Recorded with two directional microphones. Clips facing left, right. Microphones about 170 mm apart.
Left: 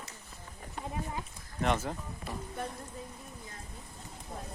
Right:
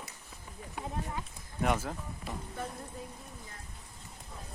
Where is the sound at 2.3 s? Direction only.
20° right (ahead or behind).